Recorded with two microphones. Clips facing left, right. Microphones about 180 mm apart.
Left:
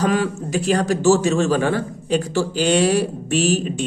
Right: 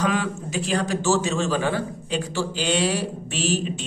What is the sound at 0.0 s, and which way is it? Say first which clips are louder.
A man's voice: left 4 dB; 40° left (ahead or behind).